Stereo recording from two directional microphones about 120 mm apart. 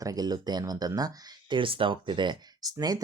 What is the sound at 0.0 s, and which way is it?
Speech, 30° right (ahead or behind).